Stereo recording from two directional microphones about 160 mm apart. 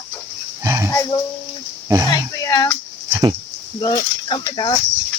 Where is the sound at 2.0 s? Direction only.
25° left (ahead or behind).